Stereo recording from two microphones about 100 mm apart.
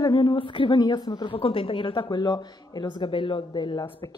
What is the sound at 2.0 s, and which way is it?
Speech, 40° left (ahead or behind).